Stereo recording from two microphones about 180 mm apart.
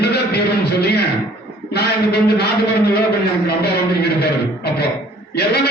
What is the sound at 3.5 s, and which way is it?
A man's voice, 65° left (ahead or behind).